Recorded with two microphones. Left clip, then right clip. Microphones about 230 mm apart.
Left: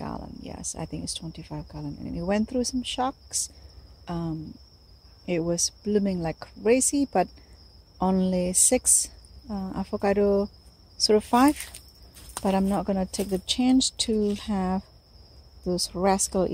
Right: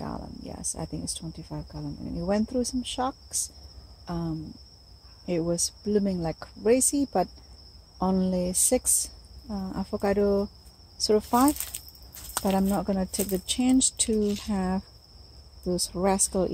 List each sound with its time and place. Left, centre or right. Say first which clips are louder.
0.0 s cricket: left 1 dB; centre
0.7 s a woman's voice: left 1 dB; centre
11.0 s a woman's voice: left 2 dB; left